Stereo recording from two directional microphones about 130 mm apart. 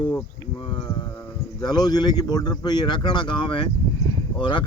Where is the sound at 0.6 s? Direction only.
40° left (ahead or behind).